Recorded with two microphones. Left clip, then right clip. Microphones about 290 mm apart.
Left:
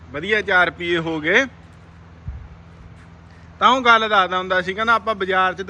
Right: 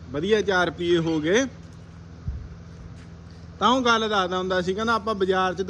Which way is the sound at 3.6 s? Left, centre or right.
Centre.